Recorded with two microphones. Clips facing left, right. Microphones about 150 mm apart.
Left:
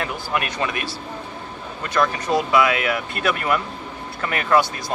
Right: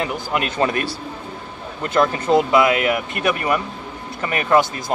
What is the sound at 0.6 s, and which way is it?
Speech, 40° right (ahead or behind).